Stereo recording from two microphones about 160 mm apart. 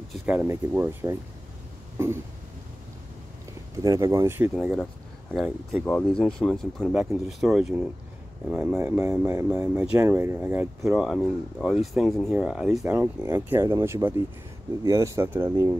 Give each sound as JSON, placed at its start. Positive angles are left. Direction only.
{"t": 0.1, "sound": "speech", "side_deg": -5}
{"t": 0.5, "sound": "speech", "side_deg": -15}
{"t": 3.7, "sound": "speech", "side_deg": -20}
{"t": 5.3, "sound": "speech", "side_deg": 0}
{"t": 9.0, "sound": "speech", "side_deg": -20}
{"t": 10.8, "sound": "speech", "side_deg": 0}